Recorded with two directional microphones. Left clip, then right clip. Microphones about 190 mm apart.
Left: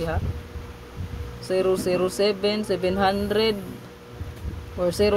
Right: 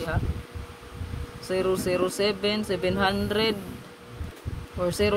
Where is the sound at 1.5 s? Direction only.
20° right (ahead or behind).